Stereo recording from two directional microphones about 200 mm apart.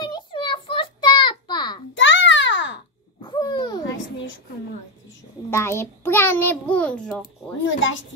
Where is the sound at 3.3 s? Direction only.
20° left (ahead or behind).